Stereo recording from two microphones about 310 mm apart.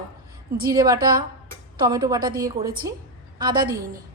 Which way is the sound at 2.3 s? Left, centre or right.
Right.